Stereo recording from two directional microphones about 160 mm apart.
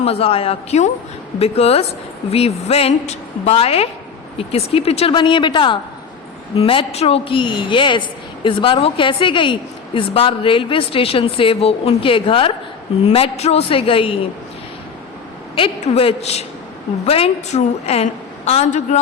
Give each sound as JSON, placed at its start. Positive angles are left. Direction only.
{"t": 0.0, "sound": "a woman's voice", "side_deg": 40}
{"t": 15.5, "sound": "a woman's voice", "side_deg": 40}